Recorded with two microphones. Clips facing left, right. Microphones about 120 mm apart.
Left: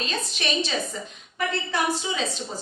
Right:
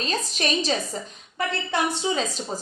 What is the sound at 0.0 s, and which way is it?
Speech, 40° right (ahead or behind).